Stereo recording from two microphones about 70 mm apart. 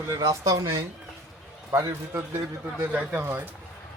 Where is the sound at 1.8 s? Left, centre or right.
Right.